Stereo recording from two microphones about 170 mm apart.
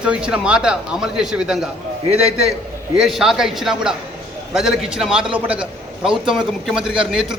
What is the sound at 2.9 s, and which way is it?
A man's voice, centre (ahead or behind).